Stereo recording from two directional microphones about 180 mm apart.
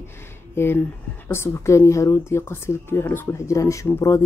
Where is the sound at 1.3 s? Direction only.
15° left (ahead or behind).